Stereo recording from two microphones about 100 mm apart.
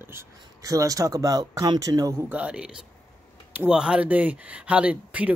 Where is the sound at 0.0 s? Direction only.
25° right (ahead or behind).